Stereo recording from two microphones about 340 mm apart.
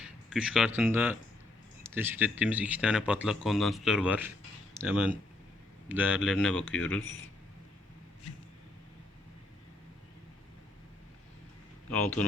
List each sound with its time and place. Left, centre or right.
0.0 s speech: centre
11.9 s speech: centre